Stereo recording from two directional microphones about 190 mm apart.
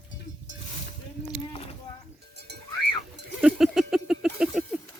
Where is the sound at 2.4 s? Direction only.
60° right (ahead or behind).